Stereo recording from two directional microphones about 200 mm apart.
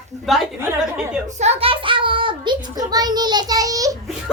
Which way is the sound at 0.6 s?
10° right (ahead or behind).